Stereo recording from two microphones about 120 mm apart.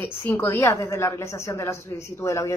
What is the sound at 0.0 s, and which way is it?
Speech, 15° left (ahead or behind).